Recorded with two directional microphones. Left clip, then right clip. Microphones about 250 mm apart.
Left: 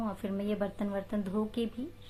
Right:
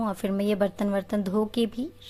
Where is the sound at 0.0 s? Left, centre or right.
Right.